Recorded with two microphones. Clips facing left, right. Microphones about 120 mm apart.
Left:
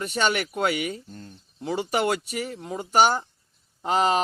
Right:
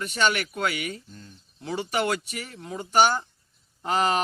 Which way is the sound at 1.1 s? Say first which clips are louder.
Left 4 dB; 45° left (ahead or behind).